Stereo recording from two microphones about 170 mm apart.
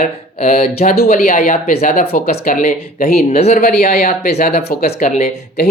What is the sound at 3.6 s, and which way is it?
Speech, 60° left (ahead or behind).